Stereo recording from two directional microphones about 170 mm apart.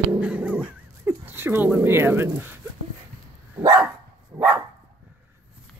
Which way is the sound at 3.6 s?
15° right (ahead or behind).